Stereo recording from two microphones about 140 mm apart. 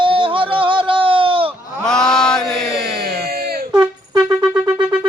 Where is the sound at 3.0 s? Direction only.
90° right.